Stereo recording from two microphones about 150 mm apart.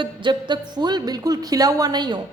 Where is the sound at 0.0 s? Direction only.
30° right (ahead or behind).